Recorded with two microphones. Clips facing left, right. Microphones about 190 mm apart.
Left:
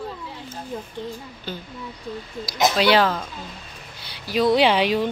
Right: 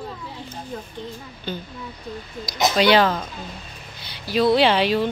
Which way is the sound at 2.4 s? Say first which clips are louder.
Right 1 dB; 5° left (ahead or behind).